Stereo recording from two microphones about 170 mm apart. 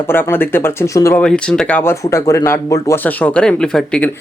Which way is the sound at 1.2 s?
5° left (ahead or behind).